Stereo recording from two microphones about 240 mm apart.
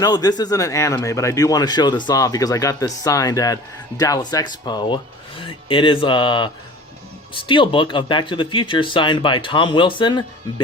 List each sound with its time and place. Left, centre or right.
0.0 s speech: centre